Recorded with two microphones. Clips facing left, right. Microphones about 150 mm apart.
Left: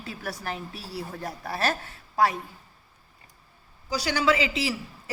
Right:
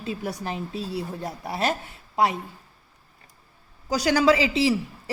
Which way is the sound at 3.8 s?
45° right (ahead or behind).